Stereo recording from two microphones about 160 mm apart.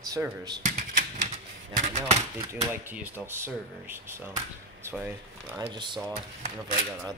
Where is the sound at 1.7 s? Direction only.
45° right (ahead or behind).